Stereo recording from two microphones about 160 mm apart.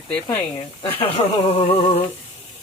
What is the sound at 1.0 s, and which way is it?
Speech, 40° left (ahead or behind).